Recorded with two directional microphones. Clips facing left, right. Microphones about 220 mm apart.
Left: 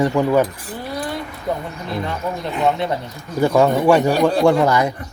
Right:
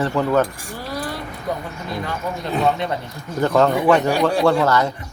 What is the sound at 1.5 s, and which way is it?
Speech, 25° left (ahead or behind).